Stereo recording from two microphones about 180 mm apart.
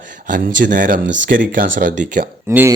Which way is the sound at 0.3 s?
50° right (ahead or behind).